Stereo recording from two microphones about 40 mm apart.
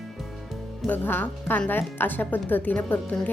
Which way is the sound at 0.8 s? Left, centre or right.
Left.